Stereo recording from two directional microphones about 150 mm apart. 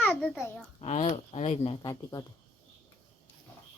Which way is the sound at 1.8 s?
25° left (ahead or behind).